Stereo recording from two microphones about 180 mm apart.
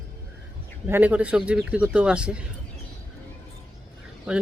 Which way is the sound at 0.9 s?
10° right (ahead or behind).